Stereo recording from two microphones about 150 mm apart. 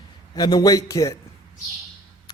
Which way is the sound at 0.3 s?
25° left (ahead or behind).